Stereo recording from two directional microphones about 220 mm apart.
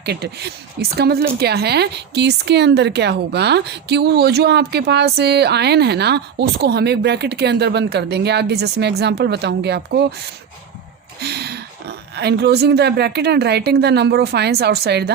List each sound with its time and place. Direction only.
0.0 s speech: 50° right (ahead or behind)
11.2 s speech: 50° right (ahead or behind)